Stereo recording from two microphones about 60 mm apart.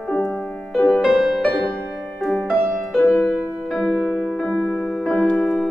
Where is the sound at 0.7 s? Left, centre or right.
Left.